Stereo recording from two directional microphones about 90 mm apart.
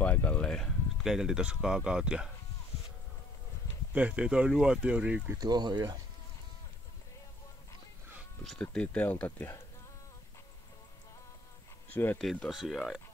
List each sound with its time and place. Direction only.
0.0 s speech: 20° left (ahead or behind); by 2.3 s 10° right (ahead or behind)
3.9 s speech: 15° right (ahead or behind)
5.4 s speech: 50° right (ahead or behind)
8.5 s speech: 15° left (ahead or behind)
11.9 s speech: 20° left (ahead or behind)
12.4 s speech: centre (ahead or behind)